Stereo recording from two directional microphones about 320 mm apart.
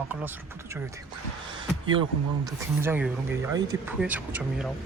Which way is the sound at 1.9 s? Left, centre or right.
Centre.